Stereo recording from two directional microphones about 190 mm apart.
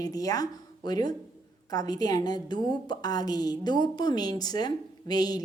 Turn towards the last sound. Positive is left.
turn(degrees=20)  # may be behind; listen again after turning